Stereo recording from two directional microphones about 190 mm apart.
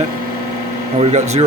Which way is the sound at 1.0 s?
35° right (ahead or behind).